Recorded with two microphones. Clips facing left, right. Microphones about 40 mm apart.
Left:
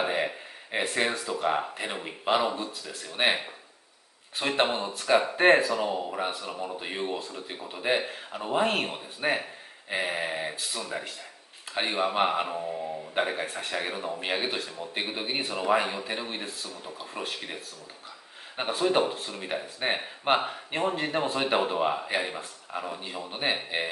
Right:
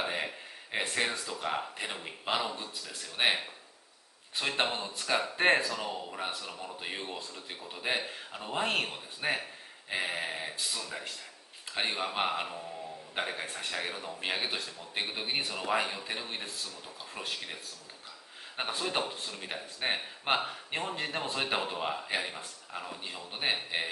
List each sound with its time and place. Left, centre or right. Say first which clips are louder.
0.0 s a sound: left 6 dB; centre
1.4 s speech: left 7 dB; centre
12.5 s speech: left 9 dB; left
13.1 s speech: left 6 dB; centre
18.6 s speech: left 8 dB; centre